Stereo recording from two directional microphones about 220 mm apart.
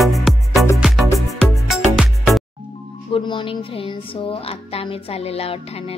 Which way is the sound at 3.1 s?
25° left (ahead or behind).